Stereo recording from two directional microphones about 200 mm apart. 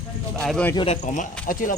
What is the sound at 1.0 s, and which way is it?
Speech, 40° left (ahead or behind).